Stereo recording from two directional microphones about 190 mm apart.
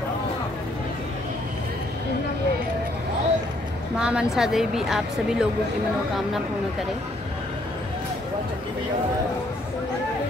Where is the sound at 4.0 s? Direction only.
5° right (ahead or behind).